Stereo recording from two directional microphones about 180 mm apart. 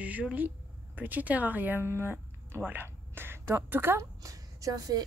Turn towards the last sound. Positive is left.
turn(degrees=-20)  # may be behind; listen again after turning